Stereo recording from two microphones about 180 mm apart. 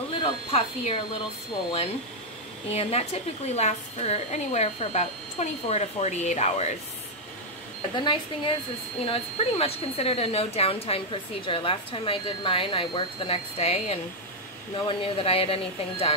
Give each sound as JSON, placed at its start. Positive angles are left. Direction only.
{"t": 0.2, "sound": "speech", "side_deg": 30}
{"t": 2.7, "sound": "speech", "side_deg": 35}
{"t": 7.9, "sound": "speech", "side_deg": 25}